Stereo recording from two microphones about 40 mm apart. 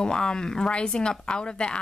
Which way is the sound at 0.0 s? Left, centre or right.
Centre.